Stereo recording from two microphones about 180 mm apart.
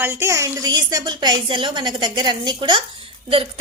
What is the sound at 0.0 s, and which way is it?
A woman's voice, 15° right (ahead or behind).